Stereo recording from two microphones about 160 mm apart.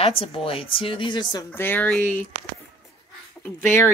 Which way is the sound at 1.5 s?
15° left (ahead or behind).